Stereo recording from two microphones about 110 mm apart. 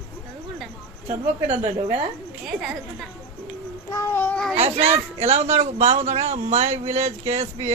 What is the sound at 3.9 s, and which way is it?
Child singing, 25° left (ahead or behind).